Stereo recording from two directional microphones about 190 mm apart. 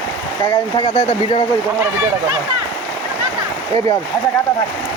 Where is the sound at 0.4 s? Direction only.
25° left (ahead or behind).